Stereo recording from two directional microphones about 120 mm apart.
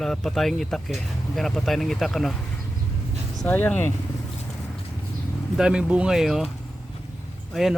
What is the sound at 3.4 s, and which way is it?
Speech, 15° left (ahead or behind).